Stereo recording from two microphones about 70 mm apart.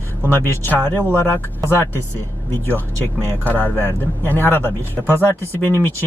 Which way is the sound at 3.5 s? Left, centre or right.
Left.